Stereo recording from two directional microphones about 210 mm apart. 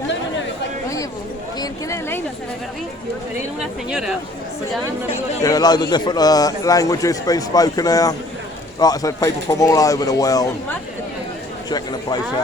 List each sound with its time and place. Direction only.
1.5 s a sound: 15° left (ahead or behind)
3.6 s speech: 5° right (ahead or behind)
5.4 s a man's voice: 15° left (ahead or behind)